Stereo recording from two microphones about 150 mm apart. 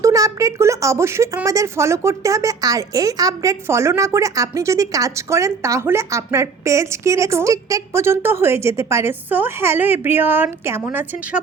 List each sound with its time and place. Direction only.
0.0 s speech: 20° right (ahead or behind)